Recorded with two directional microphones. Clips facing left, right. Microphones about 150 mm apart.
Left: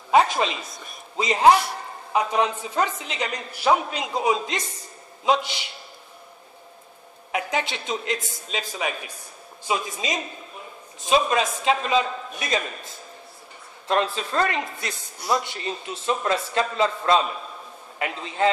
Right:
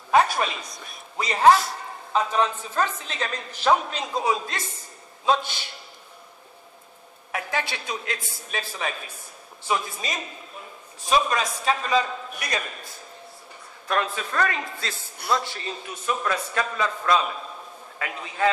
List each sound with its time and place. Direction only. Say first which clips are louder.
0.1 s a woman's voice: left 1 dB; 20° left (ahead or behind)
7.3 s a man's voice: left 3 dB; 20° left (ahead or behind)
13.8 s a man's voice: left 3 dB; 25° left (ahead or behind)